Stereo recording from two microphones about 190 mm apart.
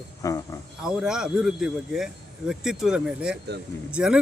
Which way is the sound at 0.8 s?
5° right (ahead or behind).